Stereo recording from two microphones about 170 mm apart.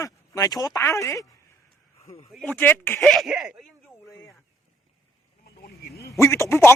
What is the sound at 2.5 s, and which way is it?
Speech, 10° left (ahead or behind).